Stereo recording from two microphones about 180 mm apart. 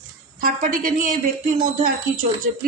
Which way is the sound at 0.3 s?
50° right (ahead or behind).